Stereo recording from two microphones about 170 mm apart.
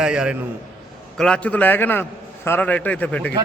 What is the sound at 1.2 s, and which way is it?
A man's voice, 5° left (ahead or behind).